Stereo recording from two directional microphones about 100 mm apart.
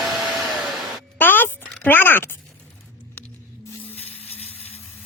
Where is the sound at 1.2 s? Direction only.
20° left (ahead or behind).